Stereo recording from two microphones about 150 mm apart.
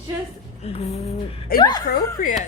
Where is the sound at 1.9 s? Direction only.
65° left (ahead or behind).